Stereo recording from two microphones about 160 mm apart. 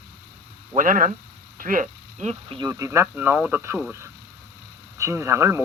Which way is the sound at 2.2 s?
35° right (ahead or behind).